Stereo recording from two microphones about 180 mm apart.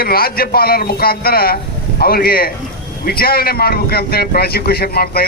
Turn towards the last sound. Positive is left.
turn(degrees=60)  # may be behind; listen again after turning